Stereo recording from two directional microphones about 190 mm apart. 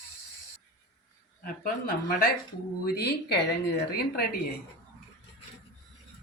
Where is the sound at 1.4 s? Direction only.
50° left (ahead or behind).